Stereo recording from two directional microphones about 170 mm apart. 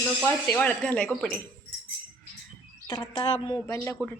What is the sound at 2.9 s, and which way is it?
Speech, 25° left (ahead or behind).